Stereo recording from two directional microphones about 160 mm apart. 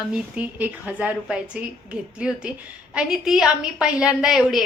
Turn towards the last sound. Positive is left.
turn(degrees=-5)  # may be behind; listen again after turning